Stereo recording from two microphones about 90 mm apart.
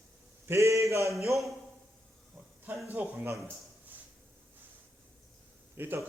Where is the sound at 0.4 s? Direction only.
30° right (ahead or behind).